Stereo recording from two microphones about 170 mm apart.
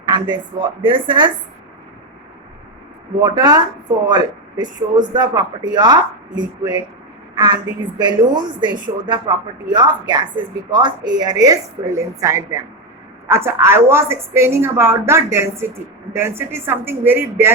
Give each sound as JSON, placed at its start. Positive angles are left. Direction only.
{"t": 0.0, "sound": "a woman's voice", "side_deg": -25}
{"t": 3.2, "sound": "a woman's voice", "side_deg": -25}